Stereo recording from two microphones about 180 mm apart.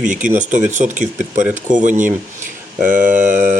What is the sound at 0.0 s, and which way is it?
Speech, 45° right (ahead or behind).